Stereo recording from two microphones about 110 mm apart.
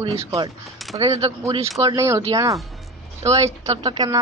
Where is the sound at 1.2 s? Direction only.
65° right (ahead or behind).